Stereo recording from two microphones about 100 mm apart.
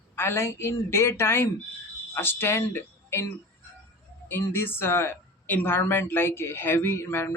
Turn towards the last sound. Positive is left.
turn(degrees=25)  # may be behind; listen again after turning